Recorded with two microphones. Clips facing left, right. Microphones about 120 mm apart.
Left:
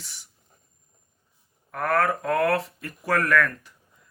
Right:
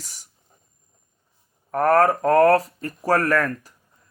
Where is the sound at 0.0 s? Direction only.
40° right (ahead or behind).